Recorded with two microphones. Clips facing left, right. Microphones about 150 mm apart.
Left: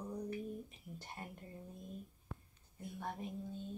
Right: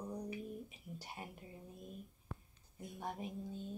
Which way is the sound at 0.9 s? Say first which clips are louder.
Even; 10° right (ahead or behind).